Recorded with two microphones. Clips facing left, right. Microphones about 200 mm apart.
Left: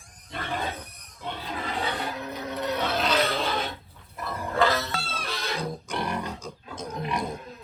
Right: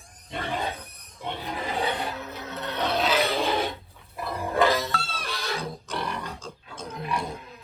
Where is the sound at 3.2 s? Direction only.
15° right (ahead or behind).